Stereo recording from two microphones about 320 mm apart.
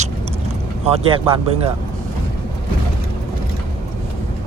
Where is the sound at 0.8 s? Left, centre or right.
Centre.